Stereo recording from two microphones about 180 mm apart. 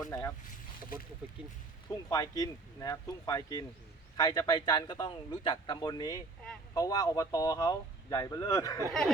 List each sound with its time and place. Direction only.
0.0 s speech: 15° left (ahead or behind)
0.4 s speech: 50° left (ahead or behind)
1.9 s speech: 20° left (ahead or behind)